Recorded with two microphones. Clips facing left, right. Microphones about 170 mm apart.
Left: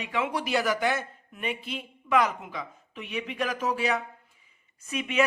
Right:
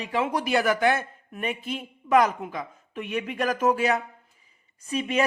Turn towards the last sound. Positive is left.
turn(degrees=-35)  # may be behind; listen again after turning